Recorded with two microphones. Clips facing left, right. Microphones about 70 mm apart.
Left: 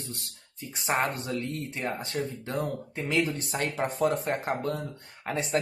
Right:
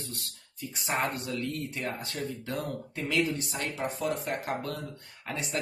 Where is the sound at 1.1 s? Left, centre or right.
Left.